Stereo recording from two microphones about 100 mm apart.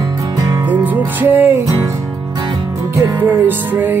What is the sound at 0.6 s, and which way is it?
Music, 15° right (ahead or behind).